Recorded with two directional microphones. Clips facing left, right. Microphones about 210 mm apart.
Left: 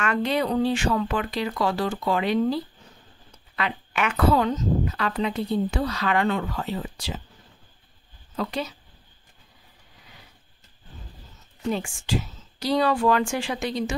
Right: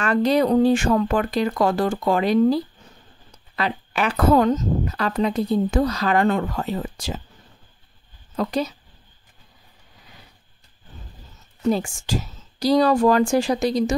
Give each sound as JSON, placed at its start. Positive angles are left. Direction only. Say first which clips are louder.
{"t": 0.0, "sound": "speech", "louder": "right 6 dB", "side_deg": -35}
{"t": 8.4, "sound": "a woman's voice", "louder": "right 5 dB", "side_deg": -40}
{"t": 11.6, "sound": "a woman's voice", "louder": "right 6 dB", "side_deg": -40}